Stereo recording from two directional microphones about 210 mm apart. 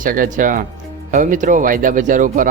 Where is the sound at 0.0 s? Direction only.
40° right (ahead or behind).